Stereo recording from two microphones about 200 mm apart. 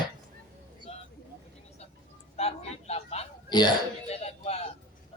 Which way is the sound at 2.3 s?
30° left (ahead or behind).